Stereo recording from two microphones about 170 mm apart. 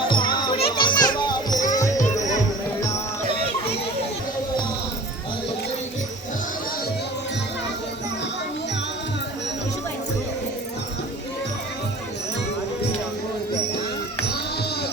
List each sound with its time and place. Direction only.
0.0 s children playing: 30° left (ahead or behind)
1.7 s music: 20° left (ahead or behind)